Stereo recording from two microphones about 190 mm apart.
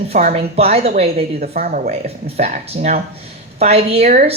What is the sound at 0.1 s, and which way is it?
Speech, 40° right (ahead or behind).